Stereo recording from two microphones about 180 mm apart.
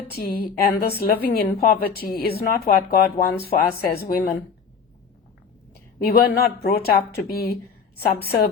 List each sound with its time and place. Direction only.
0.1 s a woman's voice: 60° left (ahead or behind)
6.0 s a woman's voice: 60° left (ahead or behind)